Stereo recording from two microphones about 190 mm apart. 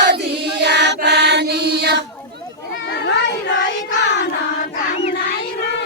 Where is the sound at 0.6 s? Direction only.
65° right (ahead or behind).